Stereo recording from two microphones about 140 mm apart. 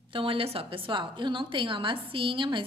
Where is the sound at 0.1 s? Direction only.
40° right (ahead or behind).